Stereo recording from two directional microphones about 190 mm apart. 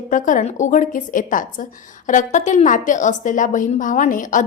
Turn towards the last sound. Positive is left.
turn(degrees=45)  # may be behind; listen again after turning